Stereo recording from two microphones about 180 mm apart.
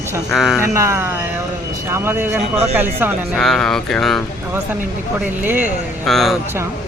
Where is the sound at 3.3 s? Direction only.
5° left (ahead or behind).